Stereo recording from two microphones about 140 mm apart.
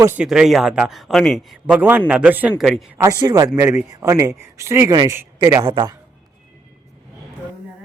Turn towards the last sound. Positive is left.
turn(degrees=-30)  # may be behind; listen again after turning